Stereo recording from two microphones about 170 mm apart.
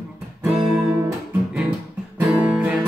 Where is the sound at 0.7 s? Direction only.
15° right (ahead or behind).